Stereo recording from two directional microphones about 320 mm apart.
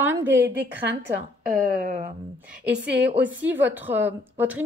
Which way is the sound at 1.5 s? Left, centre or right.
Right.